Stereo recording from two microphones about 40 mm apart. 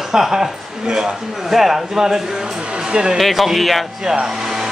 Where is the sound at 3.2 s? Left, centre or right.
Centre.